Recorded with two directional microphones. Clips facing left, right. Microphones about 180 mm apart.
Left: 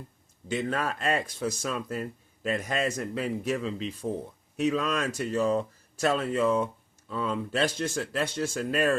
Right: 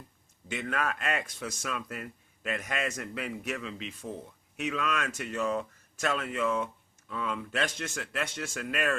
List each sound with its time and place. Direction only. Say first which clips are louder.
0.4 s speech: left 4 dB; 30° left (ahead or behind)